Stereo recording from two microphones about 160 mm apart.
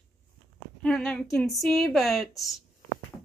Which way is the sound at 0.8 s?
5° left (ahead or behind).